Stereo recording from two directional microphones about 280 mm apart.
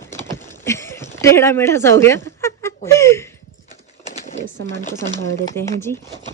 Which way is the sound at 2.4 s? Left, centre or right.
Centre.